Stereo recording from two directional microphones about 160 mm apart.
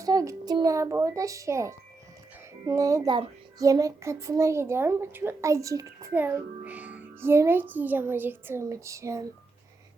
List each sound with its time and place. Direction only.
0.0 s a child's voice: 20° right (ahead or behind)